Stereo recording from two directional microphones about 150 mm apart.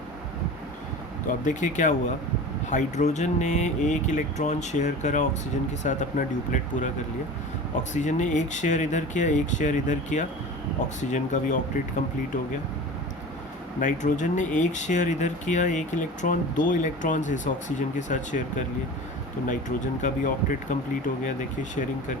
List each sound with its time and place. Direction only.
1.3 s speech: 55° left (ahead or behind)
7.9 s speech: 55° left (ahead or behind)
13.7 s speech: 55° left (ahead or behind)